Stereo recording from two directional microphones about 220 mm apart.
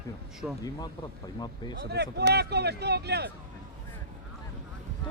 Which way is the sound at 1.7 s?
50° right (ahead or behind).